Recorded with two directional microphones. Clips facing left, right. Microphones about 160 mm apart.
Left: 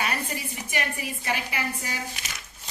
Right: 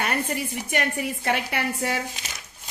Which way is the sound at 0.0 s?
55° right (ahead or behind).